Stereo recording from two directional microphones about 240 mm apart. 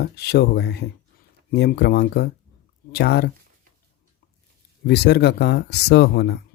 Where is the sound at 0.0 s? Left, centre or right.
Left.